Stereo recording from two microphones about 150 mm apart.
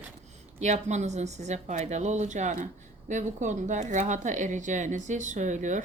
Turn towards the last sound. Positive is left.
turn(degrees=-55)  # may be behind; listen again after turning